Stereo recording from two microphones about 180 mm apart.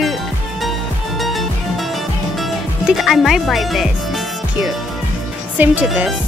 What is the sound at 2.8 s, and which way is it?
Speech, centre (ahead or behind).